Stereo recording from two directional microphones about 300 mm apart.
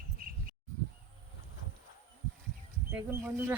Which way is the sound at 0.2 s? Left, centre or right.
Right.